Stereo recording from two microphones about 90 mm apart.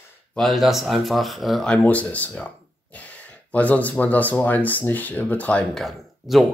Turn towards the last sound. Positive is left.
turn(degrees=0)  # may be behind; listen again after turning